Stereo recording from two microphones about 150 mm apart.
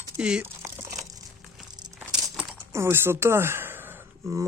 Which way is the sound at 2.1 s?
5° right (ahead or behind).